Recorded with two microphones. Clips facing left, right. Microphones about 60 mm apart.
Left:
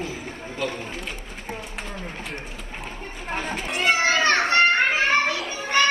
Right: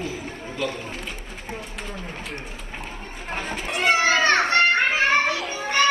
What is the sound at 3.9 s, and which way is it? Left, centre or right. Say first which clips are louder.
Children playing: right 1 dB; right.